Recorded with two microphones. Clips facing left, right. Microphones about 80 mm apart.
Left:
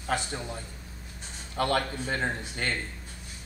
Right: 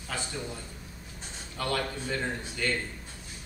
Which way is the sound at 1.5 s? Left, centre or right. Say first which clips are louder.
Left 4 dB; left.